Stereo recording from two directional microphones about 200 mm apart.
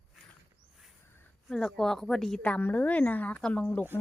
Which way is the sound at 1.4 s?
Centre (ahead or behind).